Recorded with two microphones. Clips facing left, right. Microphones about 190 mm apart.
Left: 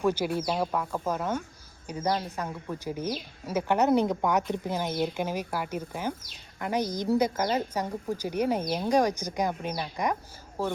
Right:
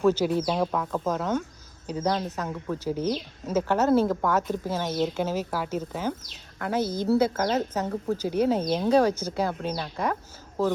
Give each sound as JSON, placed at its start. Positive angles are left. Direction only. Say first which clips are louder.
{"t": 0.0, "sound": "speech", "louder": "right 4 dB", "side_deg": 10}